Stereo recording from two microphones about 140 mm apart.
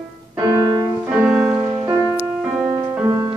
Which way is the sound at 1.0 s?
5° right (ahead or behind).